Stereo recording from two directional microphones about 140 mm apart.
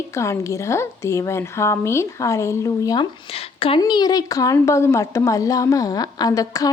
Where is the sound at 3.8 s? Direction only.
30° left (ahead or behind).